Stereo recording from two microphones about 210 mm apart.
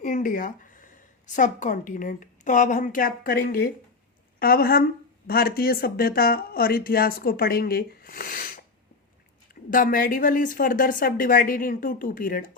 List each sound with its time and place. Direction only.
0.0 s a sound: 40° left (ahead or behind)
1.4 s a woman's voice: 35° left (ahead or behind)
9.6 s speech: 40° left (ahead or behind)